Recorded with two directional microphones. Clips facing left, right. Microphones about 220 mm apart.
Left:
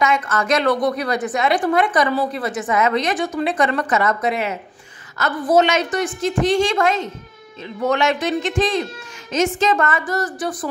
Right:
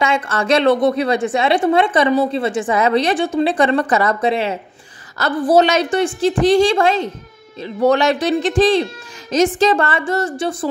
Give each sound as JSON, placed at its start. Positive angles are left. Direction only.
{"t": 0.0, "sound": "a woman's voice", "side_deg": -30}